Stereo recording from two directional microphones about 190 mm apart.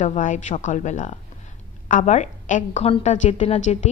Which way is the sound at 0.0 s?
40° left (ahead or behind).